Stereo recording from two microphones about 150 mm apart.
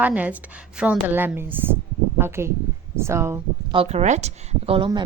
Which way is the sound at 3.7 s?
50° right (ahead or behind).